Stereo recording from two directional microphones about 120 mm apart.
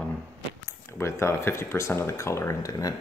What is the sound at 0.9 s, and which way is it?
Speech, 20° left (ahead or behind).